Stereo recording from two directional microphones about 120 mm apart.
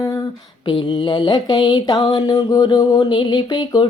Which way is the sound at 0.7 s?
40° left (ahead or behind).